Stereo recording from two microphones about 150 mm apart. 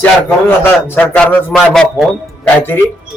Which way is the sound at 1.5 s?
Centre (ahead or behind).